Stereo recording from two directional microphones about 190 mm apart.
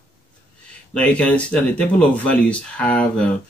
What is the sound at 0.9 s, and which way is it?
Speech, 5° left (ahead or behind).